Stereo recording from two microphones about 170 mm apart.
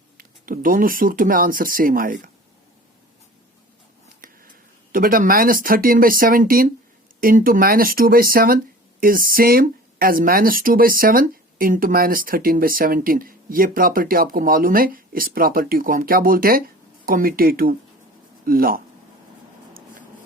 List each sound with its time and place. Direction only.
0.2 s speech: 55° right (ahead or behind)
4.2 s speech: 55° right (ahead or behind)